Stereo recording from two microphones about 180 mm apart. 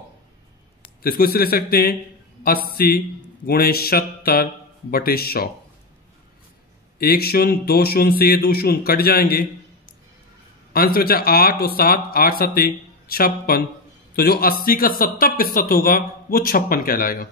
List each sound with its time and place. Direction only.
1.0 s speech: 55° left (ahead or behind)
7.0 s speech: 60° left (ahead or behind)
10.7 s a man's voice: 55° left (ahead or behind)